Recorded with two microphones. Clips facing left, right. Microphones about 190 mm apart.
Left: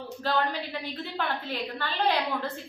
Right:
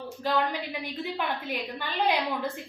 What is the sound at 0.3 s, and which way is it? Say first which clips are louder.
A woman's voice: right 1 dB; 10° right (ahead or behind).